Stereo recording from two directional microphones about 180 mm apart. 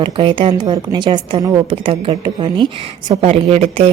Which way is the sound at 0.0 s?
25° right (ahead or behind).